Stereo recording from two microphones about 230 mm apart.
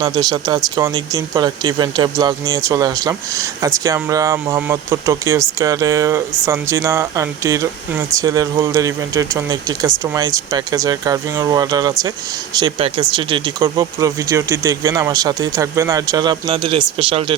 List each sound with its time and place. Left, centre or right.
0.0 s speech: centre